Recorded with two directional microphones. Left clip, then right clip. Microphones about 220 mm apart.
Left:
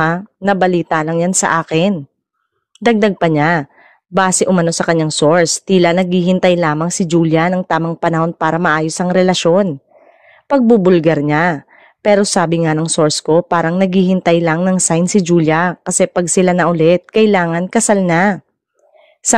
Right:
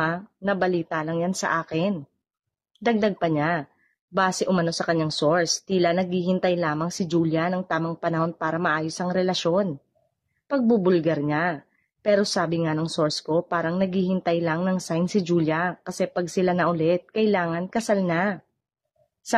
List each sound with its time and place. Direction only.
0.0 s a woman's voice: 45° left (ahead or behind)